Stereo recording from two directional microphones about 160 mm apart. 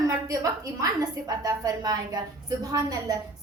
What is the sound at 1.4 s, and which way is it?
A woman's voice, 25° right (ahead or behind).